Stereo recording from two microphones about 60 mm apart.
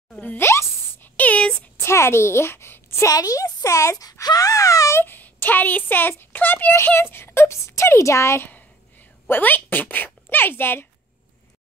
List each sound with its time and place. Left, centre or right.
0.4 s plop: left
1.0 s a sound: left
1.8 s a sound: left
3.1 s speech: left
4.9 s a child's voice: left
8.4 s speech: left